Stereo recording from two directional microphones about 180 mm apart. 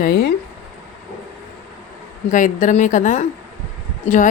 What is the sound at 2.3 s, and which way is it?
A woman's voice, 45° left (ahead or behind).